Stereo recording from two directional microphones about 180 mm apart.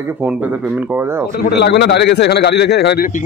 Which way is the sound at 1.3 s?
60° left (ahead or behind).